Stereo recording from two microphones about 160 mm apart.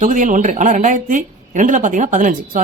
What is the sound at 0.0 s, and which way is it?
A woman's voice, 55° right (ahead or behind).